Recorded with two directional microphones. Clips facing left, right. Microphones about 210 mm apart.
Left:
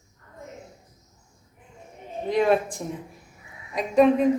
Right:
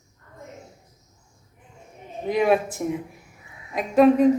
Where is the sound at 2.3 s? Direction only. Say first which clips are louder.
Right 1 dB; 10° right (ahead or behind).